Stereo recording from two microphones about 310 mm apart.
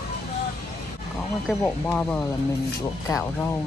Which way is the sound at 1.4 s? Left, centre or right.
Centre.